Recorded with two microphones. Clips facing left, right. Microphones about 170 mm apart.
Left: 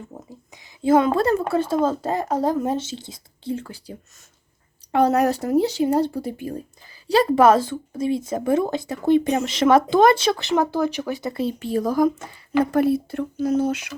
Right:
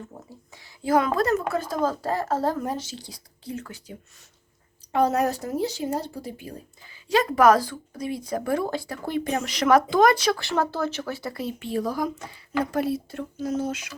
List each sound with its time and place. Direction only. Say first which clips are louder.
0.1 s a sound: left 4 dB; 20° left (ahead or behind)
0.8 s speech: left 5 dB; 25° left (ahead or behind)
4.9 s speech: left 4 dB; 65° left (ahead or behind)
7.1 s speech: left 3 dB; 30° left (ahead or behind)
11.6 s speech: left 7 dB; 40° left (ahead or behind)
12.7 s speech: left 7 dB; 55° left (ahead or behind)